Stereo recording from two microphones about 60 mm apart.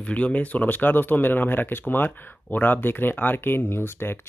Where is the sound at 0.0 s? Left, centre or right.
Left.